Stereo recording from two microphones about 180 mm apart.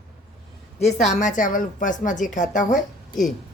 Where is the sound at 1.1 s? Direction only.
45° left (ahead or behind).